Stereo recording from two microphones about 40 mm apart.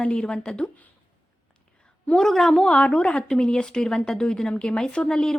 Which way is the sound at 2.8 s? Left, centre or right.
Left.